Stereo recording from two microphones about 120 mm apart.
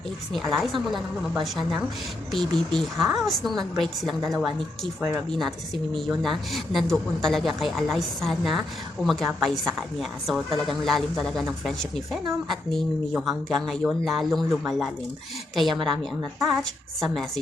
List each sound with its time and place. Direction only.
0.3 s a woman's voice: centre (ahead or behind)
4.9 s speech: 20° right (ahead or behind)
5.3 s a woman's voice: centre (ahead or behind)